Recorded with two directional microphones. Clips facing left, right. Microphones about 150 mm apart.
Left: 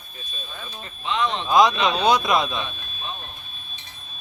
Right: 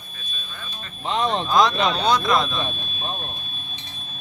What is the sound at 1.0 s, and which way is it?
Speech, 40° right (ahead or behind).